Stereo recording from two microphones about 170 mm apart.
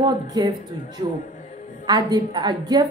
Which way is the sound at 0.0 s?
25° right (ahead or behind).